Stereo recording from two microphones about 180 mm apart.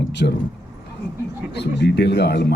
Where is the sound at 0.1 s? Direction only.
75° left (ahead or behind).